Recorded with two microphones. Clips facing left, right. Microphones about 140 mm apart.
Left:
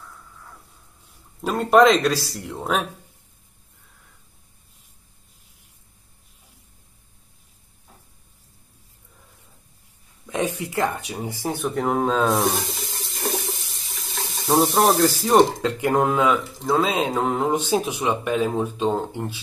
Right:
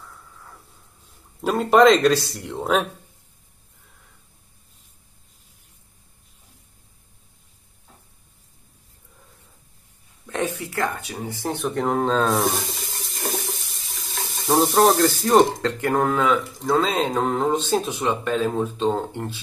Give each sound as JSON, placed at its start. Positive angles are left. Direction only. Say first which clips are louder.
{"t": 1.4, "sound": "speech", "louder": "even", "side_deg": 0}
{"t": 10.2, "sound": "a sound", "louder": "left 1 dB", "side_deg": 15}
{"t": 11.4, "sound": "water tap", "louder": "even", "side_deg": 0}
{"t": 15.6, "sound": "speech", "louder": "left 1 dB", "side_deg": 15}
{"t": 16.4, "sound": "speech", "louder": "right 1 dB", "side_deg": 0}
{"t": 16.7, "sound": "speech", "louder": "even", "side_deg": 15}